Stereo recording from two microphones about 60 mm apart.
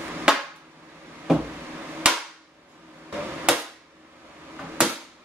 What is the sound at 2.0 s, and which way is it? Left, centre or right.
Cap gun, centre.